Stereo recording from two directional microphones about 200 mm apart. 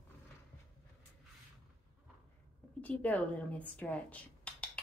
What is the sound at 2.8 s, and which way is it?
Speech, 10° left (ahead or behind).